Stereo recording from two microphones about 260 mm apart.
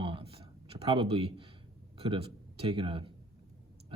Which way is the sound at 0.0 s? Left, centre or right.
Right.